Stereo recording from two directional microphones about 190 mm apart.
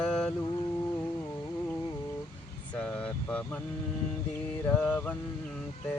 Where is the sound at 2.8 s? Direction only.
5° left (ahead or behind).